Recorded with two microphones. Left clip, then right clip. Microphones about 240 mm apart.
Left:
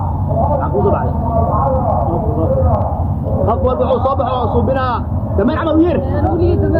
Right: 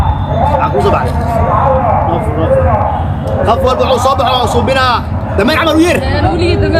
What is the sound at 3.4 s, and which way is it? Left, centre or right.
Speech, centre.